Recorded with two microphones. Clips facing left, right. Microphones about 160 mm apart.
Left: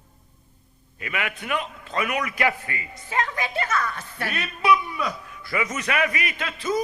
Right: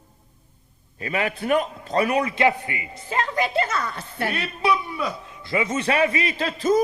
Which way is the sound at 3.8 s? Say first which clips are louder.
Right 3 dB; 30° right (ahead or behind).